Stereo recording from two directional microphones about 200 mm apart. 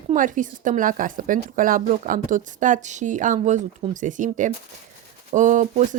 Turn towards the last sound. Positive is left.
turn(degrees=-40)  # may be behind; listen again after turning